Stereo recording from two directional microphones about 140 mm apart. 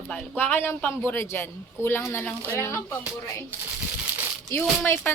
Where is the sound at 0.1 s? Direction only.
10° left (ahead or behind).